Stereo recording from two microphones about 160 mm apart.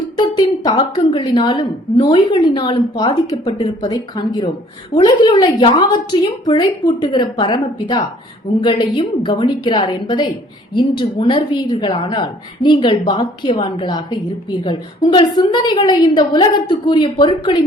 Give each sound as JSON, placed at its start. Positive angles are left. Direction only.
{"t": 0.2, "sound": "a woman's voice", "side_deg": 25}